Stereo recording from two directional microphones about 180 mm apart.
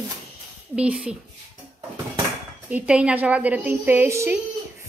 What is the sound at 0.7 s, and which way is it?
Speech, 5° right (ahead or behind).